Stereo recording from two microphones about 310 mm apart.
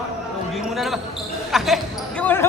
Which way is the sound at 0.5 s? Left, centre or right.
Centre.